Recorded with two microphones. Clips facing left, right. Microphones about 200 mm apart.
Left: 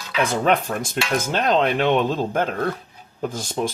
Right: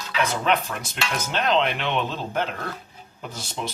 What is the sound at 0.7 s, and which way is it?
Speech, 45° left (ahead or behind).